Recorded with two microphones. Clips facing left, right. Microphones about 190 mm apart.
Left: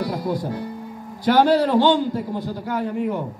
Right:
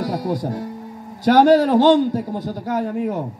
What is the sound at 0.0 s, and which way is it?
A man's voice, 45° right (ahead or behind).